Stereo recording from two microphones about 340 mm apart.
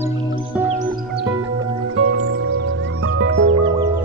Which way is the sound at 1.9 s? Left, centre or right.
Right.